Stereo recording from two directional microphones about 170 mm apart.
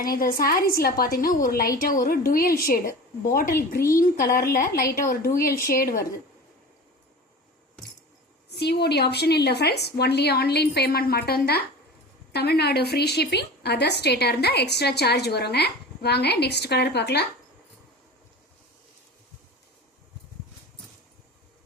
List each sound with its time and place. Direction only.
0.0 s a woman's voice: 60° left (ahead or behind)
8.5 s a woman's voice: 75° left (ahead or behind)